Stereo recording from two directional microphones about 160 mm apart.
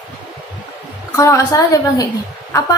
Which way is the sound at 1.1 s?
20° left (ahead or behind).